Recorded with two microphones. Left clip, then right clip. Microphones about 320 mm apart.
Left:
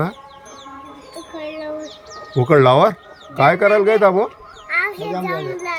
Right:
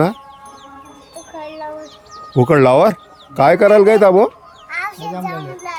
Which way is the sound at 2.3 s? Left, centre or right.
Centre.